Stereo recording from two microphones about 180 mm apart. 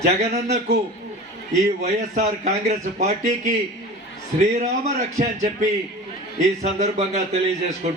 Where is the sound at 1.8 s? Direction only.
40° right (ahead or behind).